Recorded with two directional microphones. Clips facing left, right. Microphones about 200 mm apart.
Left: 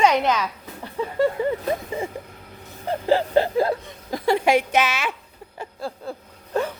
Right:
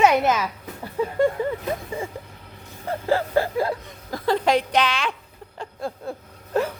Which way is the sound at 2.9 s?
20° left (ahead or behind).